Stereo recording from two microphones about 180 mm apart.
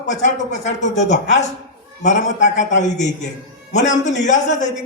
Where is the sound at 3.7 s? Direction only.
40° left (ahead or behind).